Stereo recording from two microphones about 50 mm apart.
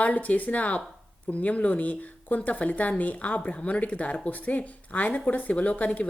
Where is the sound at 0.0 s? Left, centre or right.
Left.